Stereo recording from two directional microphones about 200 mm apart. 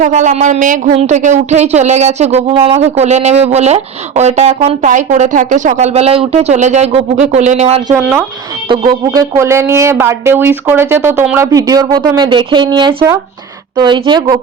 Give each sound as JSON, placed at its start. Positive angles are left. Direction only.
{"t": 0.0, "sound": "a woman's voice", "side_deg": -35}
{"t": 8.7, "sound": "a woman's voice", "side_deg": -20}